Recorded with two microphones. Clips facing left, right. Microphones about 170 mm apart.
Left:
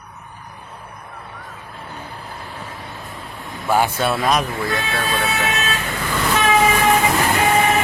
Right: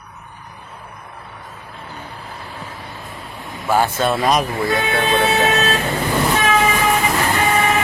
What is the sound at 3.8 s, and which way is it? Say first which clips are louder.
Speech: right 3 dB; 10° left (ahead or behind).